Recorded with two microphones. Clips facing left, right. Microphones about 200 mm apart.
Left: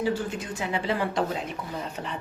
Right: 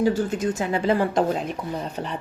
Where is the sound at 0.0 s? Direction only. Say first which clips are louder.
Right 6 dB; 45° right (ahead or behind).